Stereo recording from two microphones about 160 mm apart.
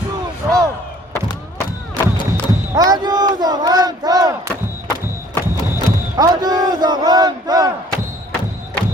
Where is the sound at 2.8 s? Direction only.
25° right (ahead or behind).